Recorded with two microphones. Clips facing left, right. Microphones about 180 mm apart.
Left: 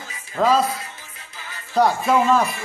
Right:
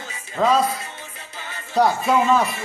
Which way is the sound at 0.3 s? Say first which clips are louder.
Even; centre (ahead or behind).